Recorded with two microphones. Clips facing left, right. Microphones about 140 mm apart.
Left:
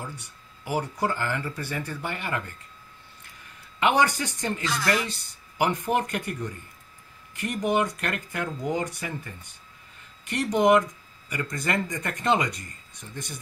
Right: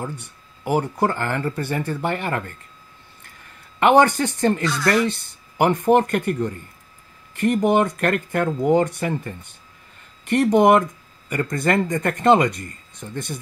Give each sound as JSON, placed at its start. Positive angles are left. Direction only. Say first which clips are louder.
{"t": 0.0, "sound": "speech", "louder": "right 7 dB", "side_deg": -55}
{"t": 3.8, "sound": "speech", "louder": "right 8 dB", "side_deg": -55}